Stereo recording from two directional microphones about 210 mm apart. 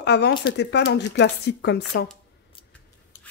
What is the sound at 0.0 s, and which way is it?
Speech, 50° left (ahead or behind).